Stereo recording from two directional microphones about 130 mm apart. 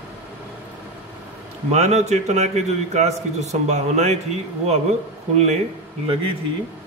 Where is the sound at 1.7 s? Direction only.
60° right (ahead or behind).